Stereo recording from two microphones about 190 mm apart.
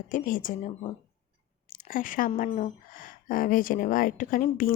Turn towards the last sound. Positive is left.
turn(degrees=45)  # may be behind; listen again after turning